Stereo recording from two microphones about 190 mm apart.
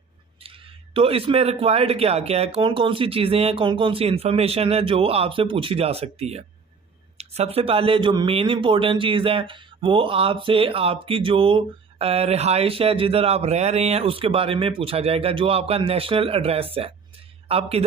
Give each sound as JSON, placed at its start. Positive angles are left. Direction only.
{"t": 0.4, "sound": "a man's voice", "side_deg": -30}